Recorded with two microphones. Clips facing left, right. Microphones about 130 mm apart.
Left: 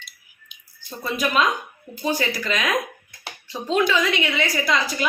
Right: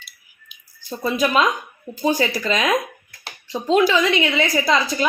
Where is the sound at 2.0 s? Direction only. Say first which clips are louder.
Right 4 dB; 30° right (ahead or behind).